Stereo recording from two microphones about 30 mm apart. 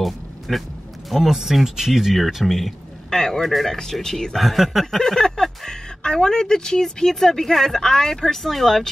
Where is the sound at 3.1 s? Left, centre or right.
Centre.